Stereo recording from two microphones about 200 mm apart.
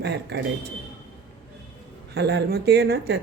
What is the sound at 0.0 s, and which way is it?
Speech, 55° right (ahead or behind).